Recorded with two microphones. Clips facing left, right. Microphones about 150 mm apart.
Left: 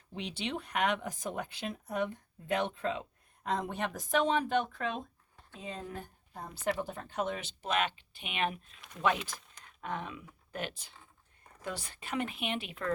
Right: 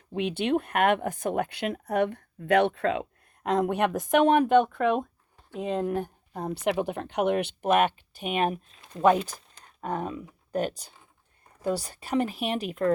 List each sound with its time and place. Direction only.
0.1 s speech: 55° right (ahead or behind)